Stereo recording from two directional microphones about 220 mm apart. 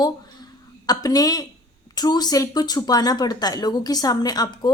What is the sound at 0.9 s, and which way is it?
A woman's voice, 15° left (ahead or behind).